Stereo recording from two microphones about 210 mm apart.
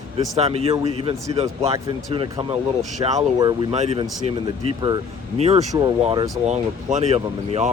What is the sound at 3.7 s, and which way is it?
Speech, 30° right (ahead or behind).